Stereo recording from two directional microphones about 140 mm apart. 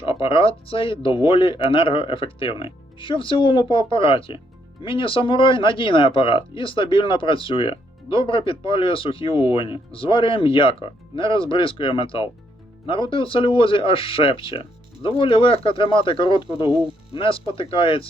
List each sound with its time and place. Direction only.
0.0 s speech: 40° left (ahead or behind)